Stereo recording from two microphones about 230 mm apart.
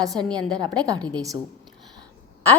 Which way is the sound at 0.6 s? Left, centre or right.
Centre.